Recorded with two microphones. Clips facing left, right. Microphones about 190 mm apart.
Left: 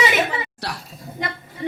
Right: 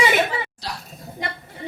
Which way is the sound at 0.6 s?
70° left (ahead or behind).